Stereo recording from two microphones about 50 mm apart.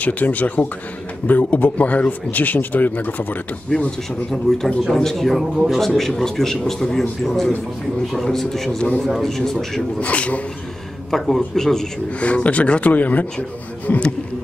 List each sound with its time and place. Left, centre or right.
0.0 s a man's voice: left
4.3 s a man's voice: centre
8.7 s speech: left
9.2 s a man's voice: centre
9.9 s speech: left
11.1 s a man's voice: centre
12.1 s speech: left